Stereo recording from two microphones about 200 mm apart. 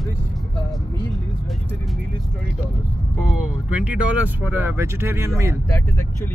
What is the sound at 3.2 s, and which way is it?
Speech, 5° right (ahead or behind).